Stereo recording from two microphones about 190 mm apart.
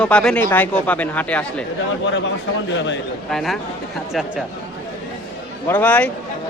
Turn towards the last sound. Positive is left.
turn(degrees=10)  # may be behind; listen again after turning